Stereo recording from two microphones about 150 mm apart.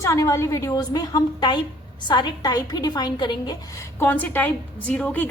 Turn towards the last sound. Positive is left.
turn(degrees=10)  # may be behind; listen again after turning